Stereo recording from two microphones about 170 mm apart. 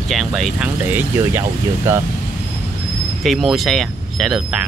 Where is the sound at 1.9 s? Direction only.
15° right (ahead or behind).